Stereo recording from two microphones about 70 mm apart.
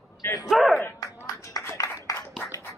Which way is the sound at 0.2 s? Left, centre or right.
Left.